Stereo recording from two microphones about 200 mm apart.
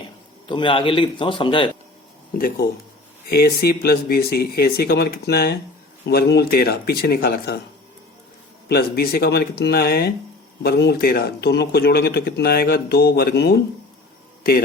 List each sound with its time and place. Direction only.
0.4 s a man's voice: 25° left (ahead or behind)
3.2 s speech: 50° left (ahead or behind)
8.7 s speech: 50° left (ahead or behind)